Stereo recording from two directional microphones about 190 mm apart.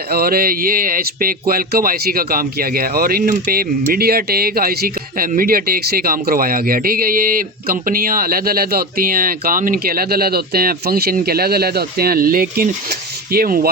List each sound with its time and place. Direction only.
0.1 s speech: 55° right (ahead or behind)